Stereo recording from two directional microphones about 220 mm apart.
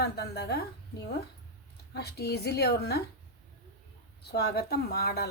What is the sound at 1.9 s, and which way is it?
Speech, 45° left (ahead or behind).